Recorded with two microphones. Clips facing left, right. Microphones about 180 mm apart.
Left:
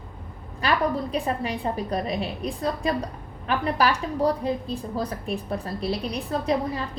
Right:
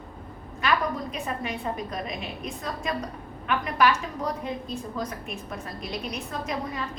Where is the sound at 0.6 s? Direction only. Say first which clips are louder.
Left 3 dB; 35° left (ahead or behind).